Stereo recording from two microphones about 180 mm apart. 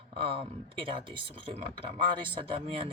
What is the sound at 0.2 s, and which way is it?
Speech, 30° right (ahead or behind).